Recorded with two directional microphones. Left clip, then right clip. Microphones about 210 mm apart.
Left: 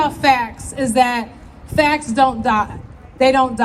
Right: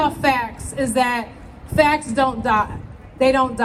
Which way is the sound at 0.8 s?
30° left (ahead or behind).